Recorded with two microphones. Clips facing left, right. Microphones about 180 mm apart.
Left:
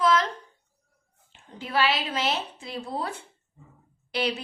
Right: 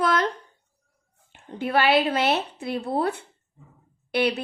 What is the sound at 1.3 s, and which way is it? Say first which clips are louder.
A woman's voice: right 7 dB; 60° right (ahead or behind).